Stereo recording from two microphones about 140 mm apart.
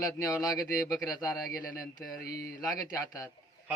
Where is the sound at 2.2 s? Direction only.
90° left.